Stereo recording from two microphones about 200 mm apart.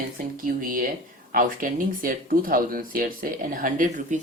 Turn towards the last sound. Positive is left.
turn(degrees=-40)  # may be behind; listen again after turning